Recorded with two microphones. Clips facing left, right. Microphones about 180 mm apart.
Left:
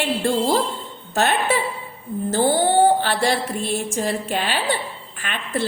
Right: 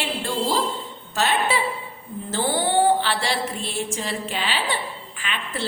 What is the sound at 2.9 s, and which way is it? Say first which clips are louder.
A woman's voice: left 4 dB; 50° left (ahead or behind).